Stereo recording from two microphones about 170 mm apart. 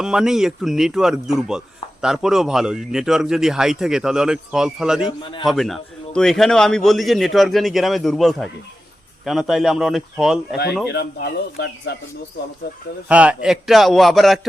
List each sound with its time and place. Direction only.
0.0 s speech: 5° right (ahead or behind)
5.2 s a man's voice: 30° left (ahead or behind)
5.5 s speech: centre (ahead or behind)
10.8 s speech: 75° left (ahead or behind)
13.1 s speech: 5° right (ahead or behind)